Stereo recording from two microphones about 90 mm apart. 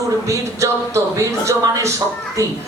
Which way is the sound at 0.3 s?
35° right (ahead or behind).